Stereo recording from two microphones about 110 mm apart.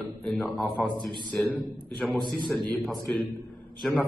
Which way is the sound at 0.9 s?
50° right (ahead or behind).